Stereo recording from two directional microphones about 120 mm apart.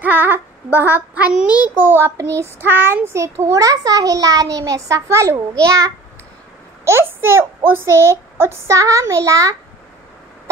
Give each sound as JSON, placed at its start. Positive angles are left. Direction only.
{"t": 0.0, "sound": "child singing", "side_deg": -15}